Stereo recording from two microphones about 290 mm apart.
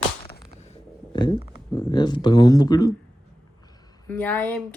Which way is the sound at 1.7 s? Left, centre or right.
Centre.